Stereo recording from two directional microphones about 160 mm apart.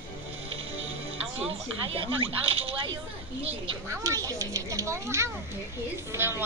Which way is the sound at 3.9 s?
20° right (ahead or behind).